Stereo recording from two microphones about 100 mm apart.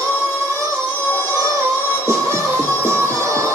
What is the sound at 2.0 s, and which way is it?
Music, 25° right (ahead or behind).